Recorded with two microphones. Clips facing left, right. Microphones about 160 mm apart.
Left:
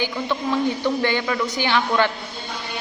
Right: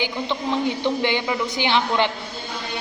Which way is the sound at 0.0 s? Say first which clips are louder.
Left 1 dB; 20° right (ahead or behind).